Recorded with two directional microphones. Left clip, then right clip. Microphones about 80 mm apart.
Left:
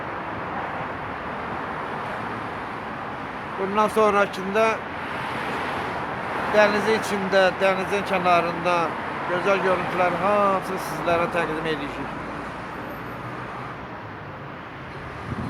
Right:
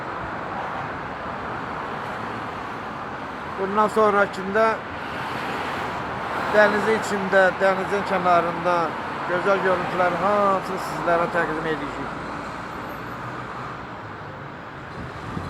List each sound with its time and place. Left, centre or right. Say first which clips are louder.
3.8 s speech: right 1 dB; centre
5.2 s vehicle: right 1 dB; right
6.5 s speech: right 1 dB; centre